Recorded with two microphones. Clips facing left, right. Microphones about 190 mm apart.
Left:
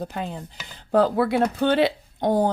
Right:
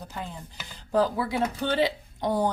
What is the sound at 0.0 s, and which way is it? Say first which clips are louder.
Speech: left 7 dB; 65° left (ahead or behind).